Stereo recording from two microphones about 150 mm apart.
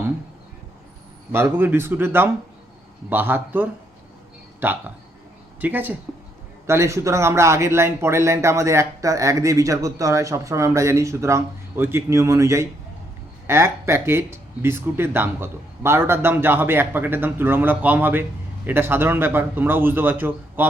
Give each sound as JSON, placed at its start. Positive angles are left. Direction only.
{"t": 1.3, "sound": "speech", "side_deg": -15}